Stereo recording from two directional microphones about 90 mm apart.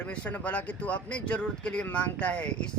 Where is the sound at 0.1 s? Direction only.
15° left (ahead or behind).